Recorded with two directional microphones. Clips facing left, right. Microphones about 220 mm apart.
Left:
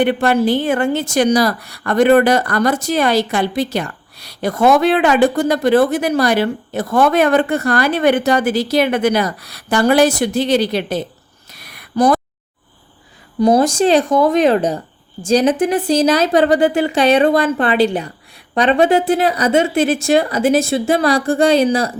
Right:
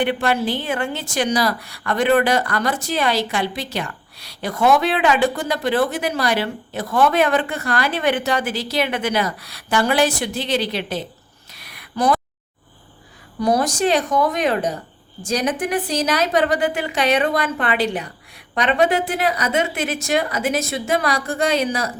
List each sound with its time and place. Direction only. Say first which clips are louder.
0.0 s a woman's voice: left 6 dB; 45° left (ahead or behind)
11.5 s a sound: left 8 dB; 45° left (ahead or behind)
13.4 s a woman's voice: left 6 dB; 25° left (ahead or behind)